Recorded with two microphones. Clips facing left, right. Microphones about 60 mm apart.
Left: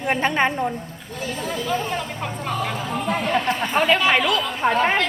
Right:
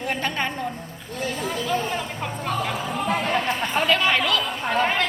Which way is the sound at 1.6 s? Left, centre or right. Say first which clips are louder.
Left 1 dB; centre.